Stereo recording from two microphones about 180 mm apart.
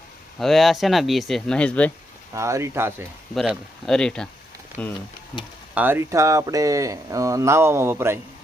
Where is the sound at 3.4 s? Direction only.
Centre (ahead or behind).